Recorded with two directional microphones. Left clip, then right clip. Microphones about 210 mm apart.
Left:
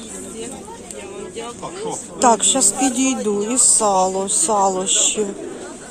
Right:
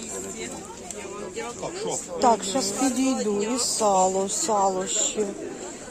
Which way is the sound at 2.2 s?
Centre (ahead or behind).